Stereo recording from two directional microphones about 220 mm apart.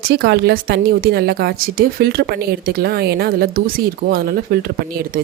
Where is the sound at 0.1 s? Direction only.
50° right (ahead or behind).